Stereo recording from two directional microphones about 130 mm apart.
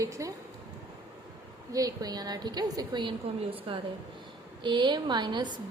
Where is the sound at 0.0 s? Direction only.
25° right (ahead or behind).